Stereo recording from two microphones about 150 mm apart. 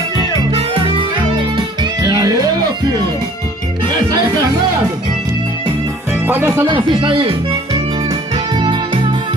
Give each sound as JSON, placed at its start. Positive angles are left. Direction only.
{"t": 0.5, "sound": "music", "side_deg": -40}
{"t": 6.2, "sound": "speech", "side_deg": -15}
{"t": 6.7, "sound": "speech", "side_deg": -35}
{"t": 8.1, "sound": "music", "side_deg": -30}